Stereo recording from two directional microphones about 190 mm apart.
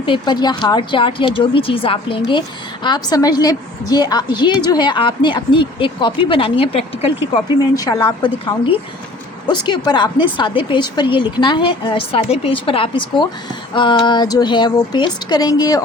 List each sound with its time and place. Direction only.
0.0 s a woman's voice: 25° left (ahead or behind)